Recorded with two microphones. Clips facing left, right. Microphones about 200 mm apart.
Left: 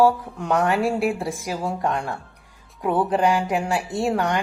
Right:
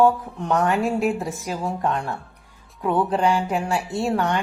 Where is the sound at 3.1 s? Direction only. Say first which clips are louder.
Left 1 dB; 10° left (ahead or behind).